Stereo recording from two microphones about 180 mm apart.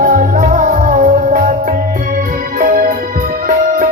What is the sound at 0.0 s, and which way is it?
Music, 50° right (ahead or behind).